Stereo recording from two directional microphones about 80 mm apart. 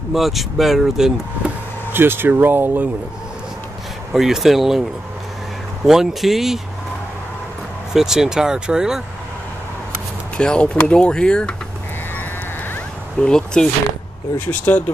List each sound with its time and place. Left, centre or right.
0.1 s speech: centre
1.9 s speech: right
4.1 s speech: centre
5.9 s speech: centre
7.9 s speech: centre
10.3 s speech: centre
13.2 s speech: centre
14.4 s speech: centre